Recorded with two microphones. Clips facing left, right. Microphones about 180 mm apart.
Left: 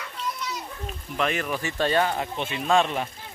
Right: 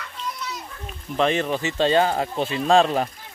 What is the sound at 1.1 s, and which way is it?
Speech, 30° right (ahead or behind).